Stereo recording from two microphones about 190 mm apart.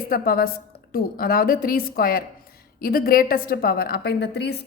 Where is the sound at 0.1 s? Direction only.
50° left (ahead or behind).